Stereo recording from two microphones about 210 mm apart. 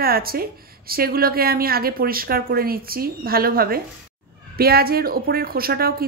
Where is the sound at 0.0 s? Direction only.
45° right (ahead or behind).